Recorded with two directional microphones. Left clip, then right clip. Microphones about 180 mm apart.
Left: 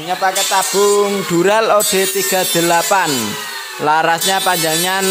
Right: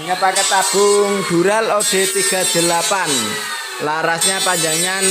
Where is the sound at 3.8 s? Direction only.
20° left (ahead or behind).